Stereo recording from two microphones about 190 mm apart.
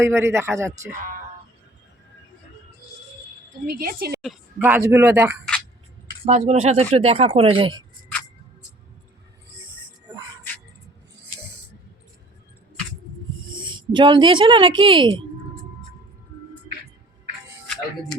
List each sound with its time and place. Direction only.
0.0 s speech: 15° right (ahead or behind)
3.7 s speech: 55° right (ahead or behind)
4.2 s speech: 5° right (ahead or behind)
6.2 s speech: 35° right (ahead or behind)
13.5 s a woman's voice: 25° right (ahead or behind)